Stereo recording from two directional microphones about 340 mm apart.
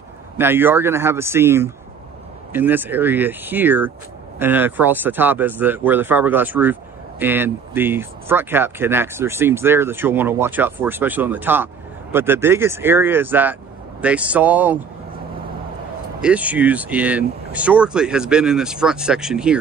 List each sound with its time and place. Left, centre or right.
0.4 s speech: centre
16.2 s speech: centre